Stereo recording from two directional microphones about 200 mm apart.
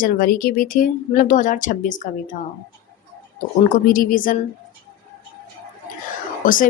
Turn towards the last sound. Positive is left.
turn(degrees=45)  # may be behind; listen again after turning